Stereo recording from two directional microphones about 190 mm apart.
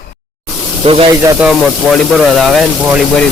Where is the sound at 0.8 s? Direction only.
30° right (ahead or behind).